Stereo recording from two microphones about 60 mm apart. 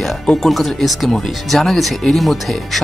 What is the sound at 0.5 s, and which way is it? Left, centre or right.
Speech, centre.